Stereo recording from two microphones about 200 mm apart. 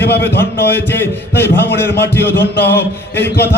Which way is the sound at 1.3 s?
55° left (ahead or behind).